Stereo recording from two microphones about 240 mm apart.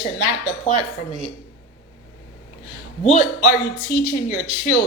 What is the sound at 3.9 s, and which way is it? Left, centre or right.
Speech, left.